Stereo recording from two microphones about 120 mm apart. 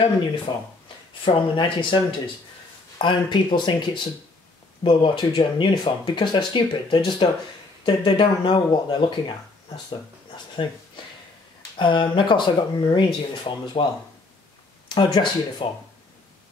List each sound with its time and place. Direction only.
0.5 s speech: 40° left (ahead or behind)
11.8 s speech: 40° left (ahead or behind)
14.9 s speech: 35° left (ahead or behind)